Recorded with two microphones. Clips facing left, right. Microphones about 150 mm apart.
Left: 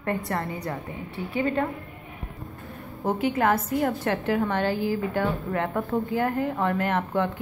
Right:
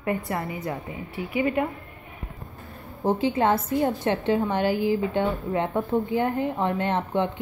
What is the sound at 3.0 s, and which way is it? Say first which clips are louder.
A woman's voice: right 1 dB; 30° right (ahead or behind).